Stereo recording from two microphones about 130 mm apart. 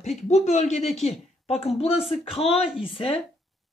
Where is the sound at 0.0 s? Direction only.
60° left (ahead or behind).